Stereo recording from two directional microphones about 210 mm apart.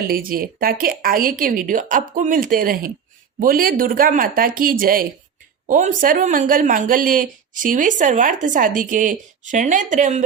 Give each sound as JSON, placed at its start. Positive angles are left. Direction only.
{"t": 0.1, "sound": "a woman's voice", "side_deg": -45}